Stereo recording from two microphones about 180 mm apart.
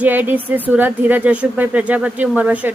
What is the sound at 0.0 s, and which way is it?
Speech, 10° right (ahead or behind).